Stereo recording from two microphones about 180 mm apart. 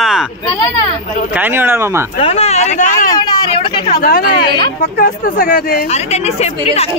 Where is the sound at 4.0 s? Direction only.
55° left (ahead or behind).